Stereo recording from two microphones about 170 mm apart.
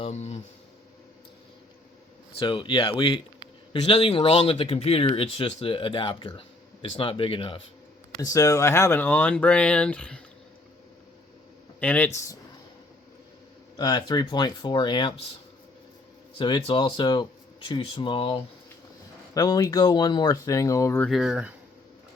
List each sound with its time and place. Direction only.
0.0 s a sound: 40° left (ahead or behind)
2.4 s speech: 30° left (ahead or behind)
8.2 s speech: 20° left (ahead or behind)
11.8 s speech: 10° left (ahead or behind)
13.7 s speech: 25° left (ahead or behind)
16.4 s speech: 30° left (ahead or behind)
21.0 s speech: centre (ahead or behind)